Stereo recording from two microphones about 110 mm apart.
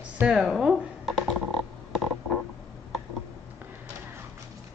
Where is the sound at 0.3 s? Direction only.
5° right (ahead or behind).